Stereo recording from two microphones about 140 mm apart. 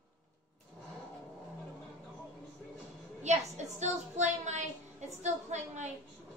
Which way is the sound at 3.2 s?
50° right (ahead or behind).